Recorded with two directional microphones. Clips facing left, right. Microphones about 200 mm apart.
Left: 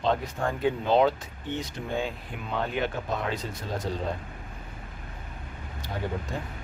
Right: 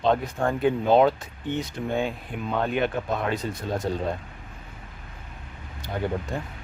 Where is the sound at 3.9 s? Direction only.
55° right (ahead or behind).